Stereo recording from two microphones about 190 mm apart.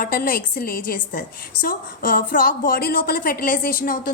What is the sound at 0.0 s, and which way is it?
A woman's voice, 50° left (ahead or behind).